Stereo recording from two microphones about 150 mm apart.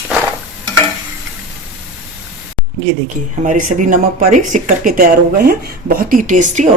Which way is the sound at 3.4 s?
55° right (ahead or behind).